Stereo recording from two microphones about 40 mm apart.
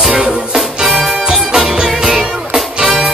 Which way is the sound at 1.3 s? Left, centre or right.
Centre.